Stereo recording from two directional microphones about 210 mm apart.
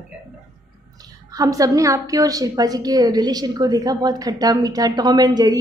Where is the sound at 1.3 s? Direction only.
15° right (ahead or behind).